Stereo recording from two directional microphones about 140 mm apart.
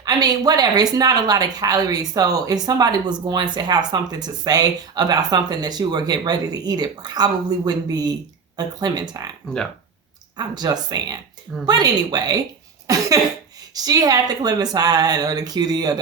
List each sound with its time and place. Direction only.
0.0 s speech: 30° right (ahead or behind)
10.3 s speech: 30° right (ahead or behind)
13.7 s speech: 25° right (ahead or behind)